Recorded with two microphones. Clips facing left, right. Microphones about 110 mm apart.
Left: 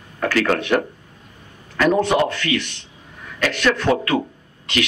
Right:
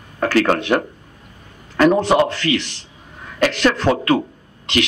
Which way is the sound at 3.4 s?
30° right (ahead or behind).